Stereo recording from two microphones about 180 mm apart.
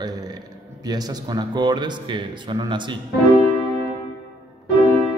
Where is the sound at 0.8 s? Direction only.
20° right (ahead or behind).